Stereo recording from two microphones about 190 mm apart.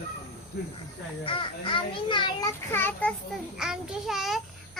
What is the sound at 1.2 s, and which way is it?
A child's voice, 30° left (ahead or behind).